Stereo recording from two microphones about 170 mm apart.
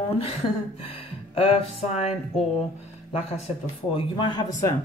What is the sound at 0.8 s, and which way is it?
Speech, 35° left (ahead or behind).